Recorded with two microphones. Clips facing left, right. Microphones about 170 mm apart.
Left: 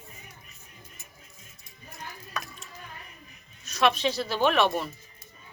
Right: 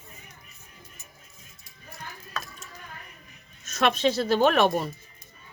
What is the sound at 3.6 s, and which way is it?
Speech, 45° right (ahead or behind).